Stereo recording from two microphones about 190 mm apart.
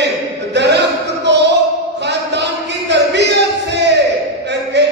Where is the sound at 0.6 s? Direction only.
65° right (ahead or behind).